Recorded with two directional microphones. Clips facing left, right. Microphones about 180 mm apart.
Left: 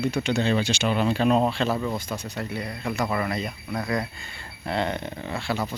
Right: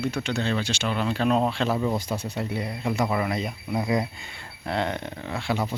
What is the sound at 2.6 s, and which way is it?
Speech, 5° right (ahead or behind).